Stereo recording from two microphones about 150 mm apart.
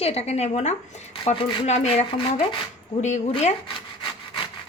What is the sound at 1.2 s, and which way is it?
A woman's voice, 40° left (ahead or behind).